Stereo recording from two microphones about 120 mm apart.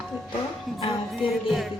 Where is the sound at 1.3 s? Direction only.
Centre (ahead or behind).